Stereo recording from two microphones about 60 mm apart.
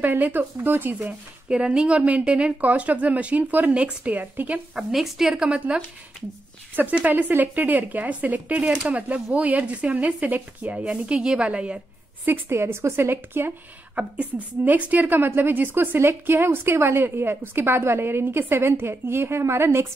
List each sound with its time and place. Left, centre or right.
0.0 s a woman's voice: right
1.5 s speech: centre
4.7 s a woman's voice: centre
6.7 s speech: right
12.3 s a woman's voice: right
13.9 s a woman's voice: right